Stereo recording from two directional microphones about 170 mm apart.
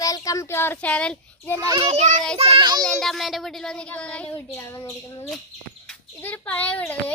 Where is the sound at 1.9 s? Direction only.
45° right (ahead or behind).